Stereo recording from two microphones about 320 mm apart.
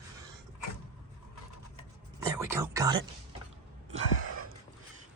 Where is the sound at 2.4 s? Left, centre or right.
Centre.